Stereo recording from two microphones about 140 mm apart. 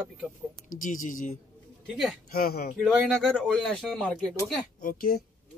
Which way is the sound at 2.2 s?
90° left.